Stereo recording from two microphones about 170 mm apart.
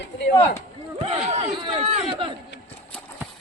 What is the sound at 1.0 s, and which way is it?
Speech, 40° right (ahead or behind).